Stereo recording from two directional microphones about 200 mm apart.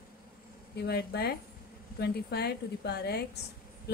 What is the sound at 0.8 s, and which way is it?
Speech, 55° left (ahead or behind).